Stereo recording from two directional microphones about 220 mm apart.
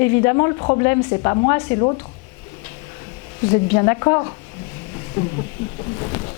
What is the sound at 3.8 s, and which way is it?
Speech, 20° left (ahead or behind).